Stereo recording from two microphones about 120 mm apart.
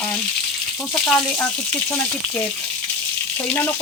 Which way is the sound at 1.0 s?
10° left (ahead or behind).